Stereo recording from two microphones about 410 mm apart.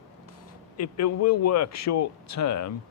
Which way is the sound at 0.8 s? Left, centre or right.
Left.